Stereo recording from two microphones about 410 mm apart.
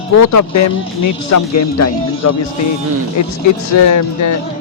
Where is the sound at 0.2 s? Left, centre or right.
Left.